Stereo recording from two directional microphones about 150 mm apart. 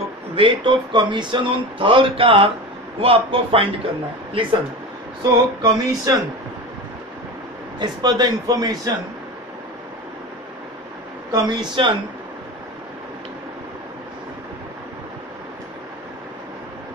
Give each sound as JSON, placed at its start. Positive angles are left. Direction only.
{"t": 0.4, "sound": "speech", "side_deg": -35}
{"t": 5.2, "sound": "a man's voice", "side_deg": -30}
{"t": 7.8, "sound": "a man's voice", "side_deg": -25}
{"t": 11.3, "sound": "speech", "side_deg": -30}